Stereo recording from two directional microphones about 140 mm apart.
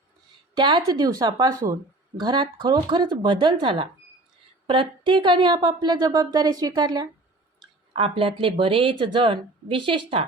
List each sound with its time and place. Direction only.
0.5 s a woman's voice: 30° right (ahead or behind)
7.9 s speech: 40° right (ahead or behind)